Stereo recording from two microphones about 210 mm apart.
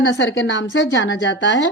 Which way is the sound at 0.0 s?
60° left (ahead or behind).